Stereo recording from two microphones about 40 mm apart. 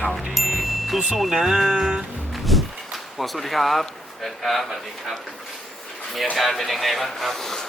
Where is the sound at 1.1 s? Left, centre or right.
Centre.